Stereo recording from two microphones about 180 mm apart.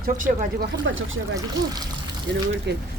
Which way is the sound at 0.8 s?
90° right.